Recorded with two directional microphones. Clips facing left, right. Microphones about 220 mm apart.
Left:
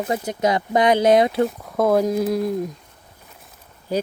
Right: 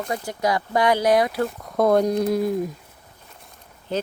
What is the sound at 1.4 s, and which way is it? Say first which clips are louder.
Speech: left 1 dB; centre (ahead or behind).